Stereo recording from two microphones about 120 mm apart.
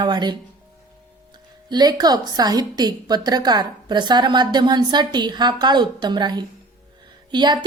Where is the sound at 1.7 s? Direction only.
35° right (ahead or behind).